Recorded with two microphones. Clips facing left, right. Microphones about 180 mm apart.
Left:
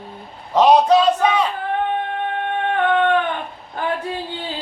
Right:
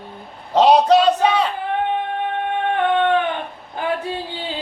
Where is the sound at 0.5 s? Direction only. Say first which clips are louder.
Even; 30° right (ahead or behind).